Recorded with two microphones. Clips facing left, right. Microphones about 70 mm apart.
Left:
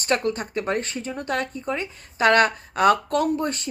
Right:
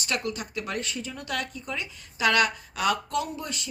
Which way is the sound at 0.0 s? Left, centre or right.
Left.